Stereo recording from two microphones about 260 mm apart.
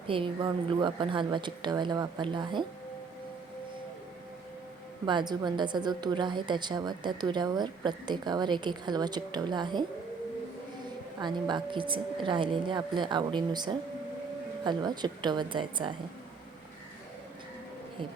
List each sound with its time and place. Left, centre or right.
0.1 s a woman's voice: centre
5.0 s a woman's voice: centre
11.2 s a woman's voice: centre